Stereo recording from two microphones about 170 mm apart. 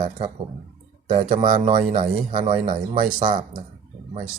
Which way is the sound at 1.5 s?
50° right (ahead or behind).